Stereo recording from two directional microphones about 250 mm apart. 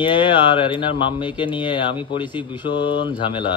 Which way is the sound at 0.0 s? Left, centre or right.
Centre.